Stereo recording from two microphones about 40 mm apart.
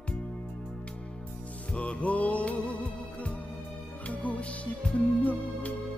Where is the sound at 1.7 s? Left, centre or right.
Left.